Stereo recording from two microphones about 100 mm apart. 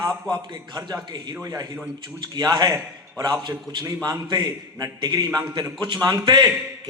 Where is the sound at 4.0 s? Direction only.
45° right (ahead or behind).